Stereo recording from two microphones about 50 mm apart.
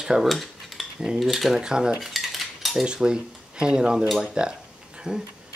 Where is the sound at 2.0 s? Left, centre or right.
Centre.